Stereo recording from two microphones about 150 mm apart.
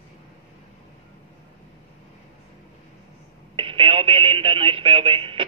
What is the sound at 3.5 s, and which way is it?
Speech, 35° right (ahead or behind).